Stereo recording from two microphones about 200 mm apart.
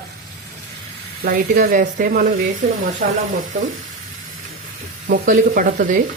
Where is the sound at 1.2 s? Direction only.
45° right (ahead or behind).